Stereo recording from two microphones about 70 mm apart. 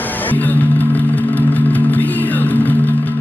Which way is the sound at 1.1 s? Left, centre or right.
Left.